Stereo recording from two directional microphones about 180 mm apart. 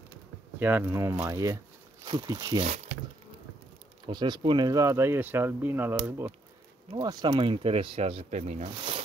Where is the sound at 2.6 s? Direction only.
40° right (ahead or behind).